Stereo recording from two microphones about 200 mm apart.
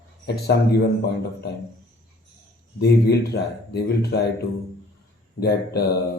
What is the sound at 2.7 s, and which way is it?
Speech, 55° left (ahead or behind).